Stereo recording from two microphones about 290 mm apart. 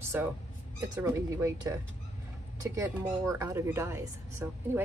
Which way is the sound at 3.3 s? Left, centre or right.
Centre.